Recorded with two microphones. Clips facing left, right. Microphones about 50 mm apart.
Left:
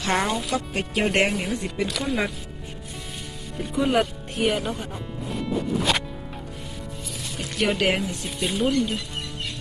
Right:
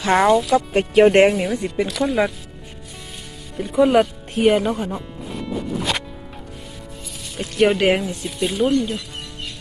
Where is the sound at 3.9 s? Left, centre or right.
Right.